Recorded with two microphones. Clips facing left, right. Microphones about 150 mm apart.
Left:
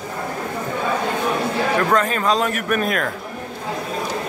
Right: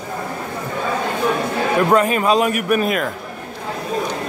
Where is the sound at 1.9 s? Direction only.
10° right (ahead or behind).